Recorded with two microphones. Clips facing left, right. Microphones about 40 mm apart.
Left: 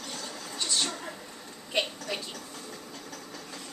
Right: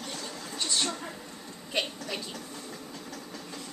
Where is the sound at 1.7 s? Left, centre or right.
Centre.